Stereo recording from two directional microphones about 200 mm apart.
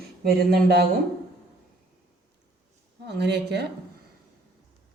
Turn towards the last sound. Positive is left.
turn(degrees=-55)  # may be behind; listen again after turning